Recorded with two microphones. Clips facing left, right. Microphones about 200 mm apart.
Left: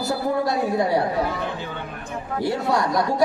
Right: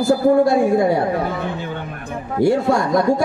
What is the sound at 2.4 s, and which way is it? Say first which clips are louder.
Speech: right 7 dB; 50° right (ahead or behind).